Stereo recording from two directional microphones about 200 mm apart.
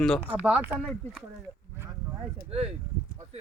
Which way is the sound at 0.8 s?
5° left (ahead or behind).